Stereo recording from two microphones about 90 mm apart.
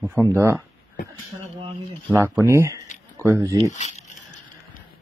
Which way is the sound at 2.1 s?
35° right (ahead or behind).